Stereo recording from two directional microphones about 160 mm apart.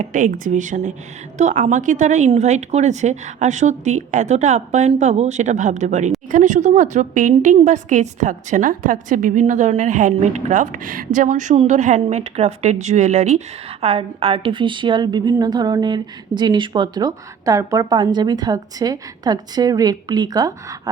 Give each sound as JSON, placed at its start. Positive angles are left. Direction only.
{"t": 0.0, "sound": "a woman's voice", "side_deg": -55}